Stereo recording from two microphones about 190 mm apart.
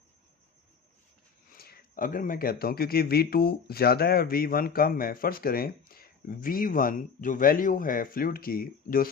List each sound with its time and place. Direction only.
1.5 s speech: 50° left (ahead or behind)